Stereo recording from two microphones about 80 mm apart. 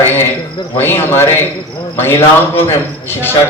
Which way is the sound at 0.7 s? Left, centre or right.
Left.